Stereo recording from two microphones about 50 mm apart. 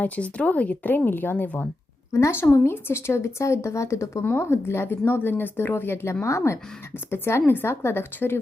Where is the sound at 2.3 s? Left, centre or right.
Left.